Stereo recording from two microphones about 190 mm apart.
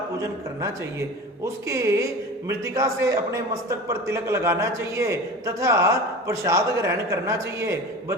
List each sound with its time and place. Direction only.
0.2 s a man's voice: 15° right (ahead or behind)